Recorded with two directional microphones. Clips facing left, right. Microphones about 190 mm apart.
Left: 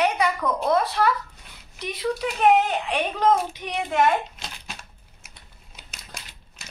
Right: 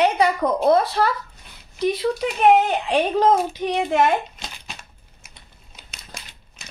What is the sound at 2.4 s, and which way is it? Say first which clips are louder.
A child's voice: right 3 dB; 30° right (ahead or behind).